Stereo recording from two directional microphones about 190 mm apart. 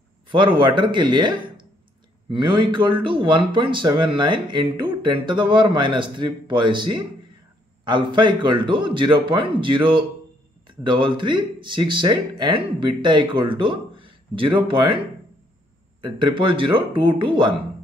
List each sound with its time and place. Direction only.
0.3 s speech: 25° right (ahead or behind)
2.3 s speech: 25° right (ahead or behind)
16.0 s speech: 25° right (ahead or behind)